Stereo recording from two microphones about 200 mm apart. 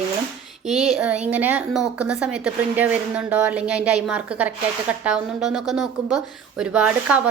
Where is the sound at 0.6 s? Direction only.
5° right (ahead or behind).